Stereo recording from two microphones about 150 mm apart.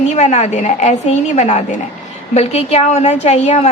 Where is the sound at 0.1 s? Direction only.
50° left (ahead or behind).